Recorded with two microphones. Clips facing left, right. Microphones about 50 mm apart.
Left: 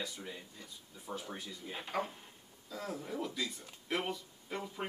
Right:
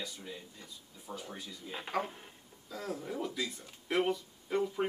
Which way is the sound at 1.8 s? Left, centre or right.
Centre.